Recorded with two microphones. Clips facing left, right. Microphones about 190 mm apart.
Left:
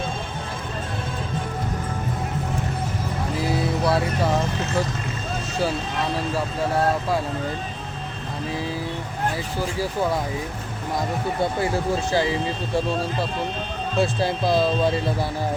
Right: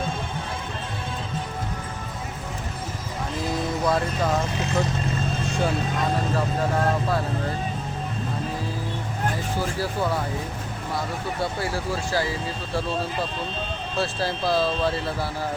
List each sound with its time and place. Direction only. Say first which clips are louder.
3.3 s music: left 2 dB; 10° left (ahead or behind)
9.7 s speech: left 4 dB; 15° left (ahead or behind)
11.6 s speech: left 4 dB; 20° left (ahead or behind)
14.0 s speech: left 4 dB; 15° left (ahead or behind)